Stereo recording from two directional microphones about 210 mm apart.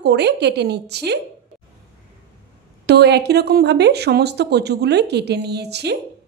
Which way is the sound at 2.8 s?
50° right (ahead or behind).